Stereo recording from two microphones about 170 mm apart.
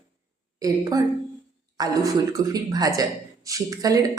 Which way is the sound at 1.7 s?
20° right (ahead or behind).